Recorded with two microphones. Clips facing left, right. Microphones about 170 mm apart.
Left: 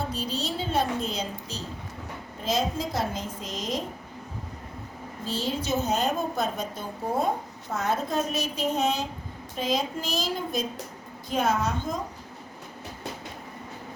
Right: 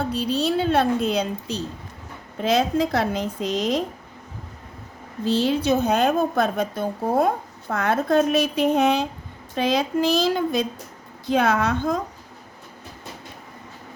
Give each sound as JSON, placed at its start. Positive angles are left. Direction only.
{"t": 0.1, "sound": "a woman's voice", "side_deg": -60}
{"t": 5.2, "sound": "a woman's voice", "side_deg": -70}